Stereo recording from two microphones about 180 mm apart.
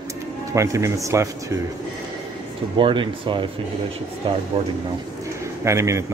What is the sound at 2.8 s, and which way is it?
Speech, 25° right (ahead or behind).